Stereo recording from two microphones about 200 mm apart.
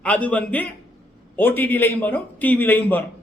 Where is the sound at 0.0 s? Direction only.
5° left (ahead or behind).